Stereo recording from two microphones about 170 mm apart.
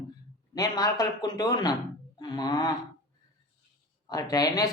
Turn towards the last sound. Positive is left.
turn(degrees=20)  # may be behind; listen again after turning